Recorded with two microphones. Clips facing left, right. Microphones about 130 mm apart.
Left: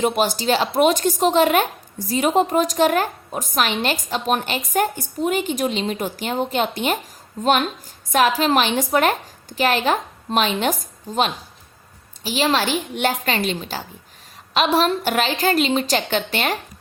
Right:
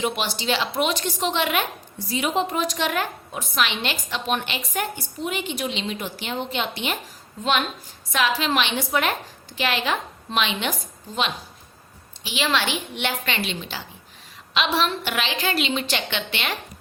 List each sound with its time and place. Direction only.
0.0 s a woman's voice: 45° left (ahead or behind)